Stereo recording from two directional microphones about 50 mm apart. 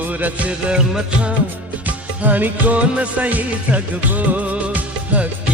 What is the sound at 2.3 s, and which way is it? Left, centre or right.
Music, right.